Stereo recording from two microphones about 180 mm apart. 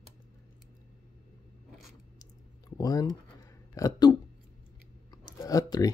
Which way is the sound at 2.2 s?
20° left (ahead or behind).